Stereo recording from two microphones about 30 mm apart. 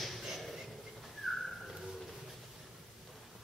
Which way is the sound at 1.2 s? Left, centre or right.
Centre.